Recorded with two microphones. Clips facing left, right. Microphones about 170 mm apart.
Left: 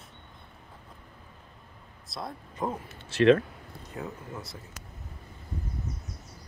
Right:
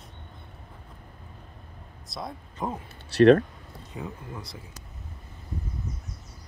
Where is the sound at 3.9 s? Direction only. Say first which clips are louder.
Even; centre (ahead or behind).